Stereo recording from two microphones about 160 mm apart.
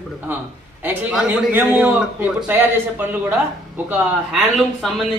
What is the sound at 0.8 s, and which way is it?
A man's voice, 10° right (ahead or behind).